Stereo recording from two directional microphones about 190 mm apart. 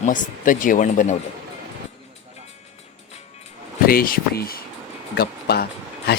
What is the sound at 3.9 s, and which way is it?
Speech, 50° left (ahead or behind).